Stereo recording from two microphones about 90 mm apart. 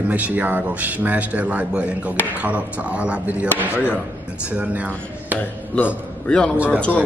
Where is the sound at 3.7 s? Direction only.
20° left (ahead or behind).